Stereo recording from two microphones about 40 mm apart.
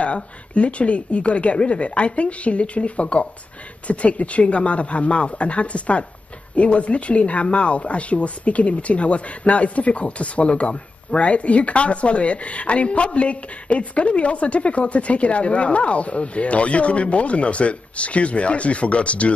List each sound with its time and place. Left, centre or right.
0.0 s speech: left